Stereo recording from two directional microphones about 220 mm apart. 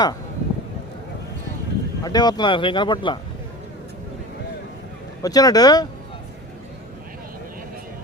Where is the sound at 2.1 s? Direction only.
20° left (ahead or behind).